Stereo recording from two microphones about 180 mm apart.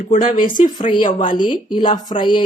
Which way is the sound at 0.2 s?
50° left (ahead or behind).